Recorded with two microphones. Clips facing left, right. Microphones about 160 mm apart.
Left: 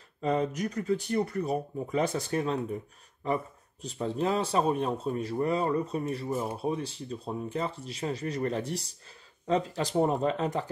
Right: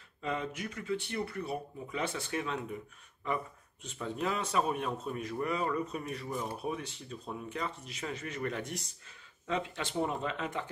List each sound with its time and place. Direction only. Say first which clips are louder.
0.2 s speech: left 8 dB; 40° left (ahead or behind)
3.8 s speech: left 6 dB; 35° left (ahead or behind)